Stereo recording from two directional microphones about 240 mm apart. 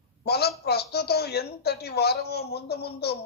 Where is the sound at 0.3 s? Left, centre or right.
Left.